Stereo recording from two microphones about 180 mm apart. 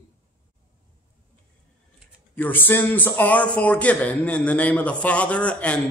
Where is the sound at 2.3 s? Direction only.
10° left (ahead or behind).